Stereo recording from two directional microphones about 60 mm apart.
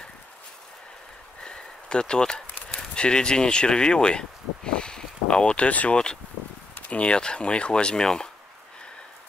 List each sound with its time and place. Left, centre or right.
1.4 s speech: centre